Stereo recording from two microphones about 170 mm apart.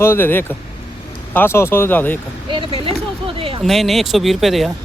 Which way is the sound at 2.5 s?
30° right (ahead or behind).